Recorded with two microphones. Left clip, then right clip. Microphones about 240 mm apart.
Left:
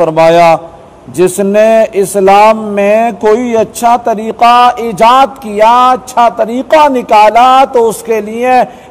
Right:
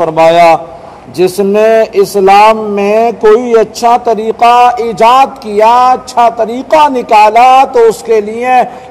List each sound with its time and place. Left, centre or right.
0.0 s a man's voice: left
3.8 s a man's voice: left